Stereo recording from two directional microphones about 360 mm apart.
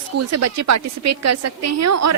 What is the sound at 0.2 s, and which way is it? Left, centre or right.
A woman's voice, right.